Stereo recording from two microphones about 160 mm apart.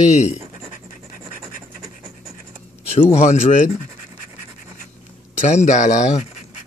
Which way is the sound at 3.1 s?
45° left (ahead or behind).